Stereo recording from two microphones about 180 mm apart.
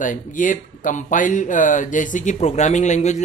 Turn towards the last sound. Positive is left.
turn(degrees=40)  # may be behind; listen again after turning